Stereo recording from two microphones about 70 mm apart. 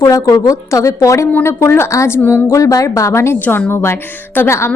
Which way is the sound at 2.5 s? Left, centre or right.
Left.